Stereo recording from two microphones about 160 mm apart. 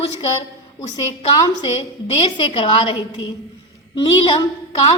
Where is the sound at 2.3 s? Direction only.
35° left (ahead or behind).